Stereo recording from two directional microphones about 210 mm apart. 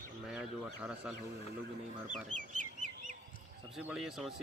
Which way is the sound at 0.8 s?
5° right (ahead or behind).